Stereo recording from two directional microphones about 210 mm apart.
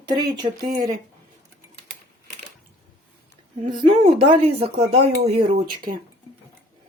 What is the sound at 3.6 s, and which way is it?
Speech, 20° right (ahead or behind).